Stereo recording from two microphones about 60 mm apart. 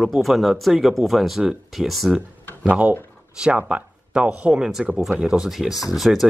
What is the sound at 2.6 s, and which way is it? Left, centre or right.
Speech, right.